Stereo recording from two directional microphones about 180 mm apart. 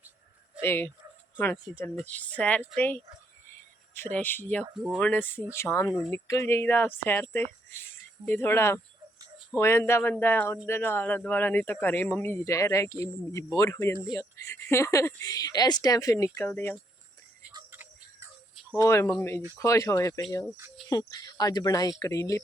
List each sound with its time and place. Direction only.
0.6 s speech: 15° left (ahead or behind)
18.7 s speech: 15° left (ahead or behind)